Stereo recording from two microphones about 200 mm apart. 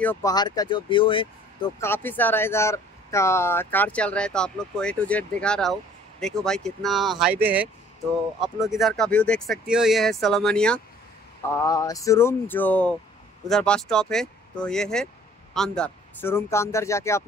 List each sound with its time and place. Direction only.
0.0 s speech: 15° left (ahead or behind)
1.8 s speech: 10° left (ahead or behind)
11.6 s speech: 15° left (ahead or behind)